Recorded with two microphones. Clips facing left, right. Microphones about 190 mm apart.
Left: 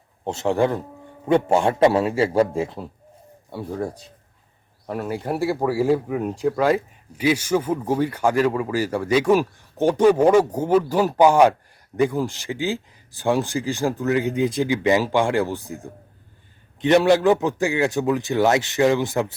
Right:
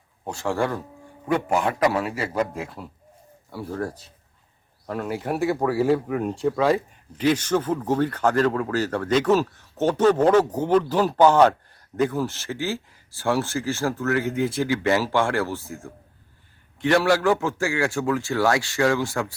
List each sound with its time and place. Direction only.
0.3 s a man's voice: 20° left (ahead or behind)
3.5 s a man's voice: 15° left (ahead or behind)
5.1 s speech: 5° right (ahead or behind)
5.4 s a man's voice: 10° left (ahead or behind)